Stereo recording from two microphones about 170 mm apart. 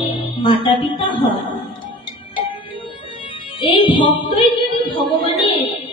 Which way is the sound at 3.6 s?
30° left (ahead or behind).